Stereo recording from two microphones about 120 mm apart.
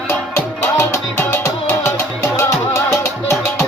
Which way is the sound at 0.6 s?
20° left (ahead or behind).